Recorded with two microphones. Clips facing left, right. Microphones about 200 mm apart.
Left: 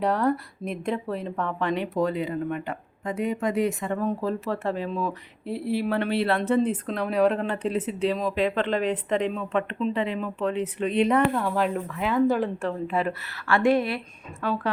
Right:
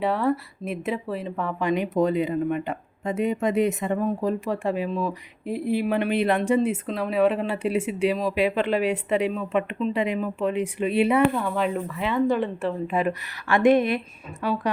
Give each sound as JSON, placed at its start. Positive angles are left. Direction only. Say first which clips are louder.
{"t": 0.0, "sound": "speech", "louder": "even", "side_deg": 0}
{"t": 12.9, "sound": "speech", "louder": "right 2 dB", "side_deg": -15}